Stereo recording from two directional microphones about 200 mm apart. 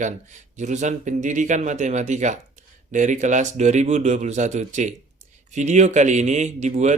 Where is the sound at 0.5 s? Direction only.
35° right (ahead or behind).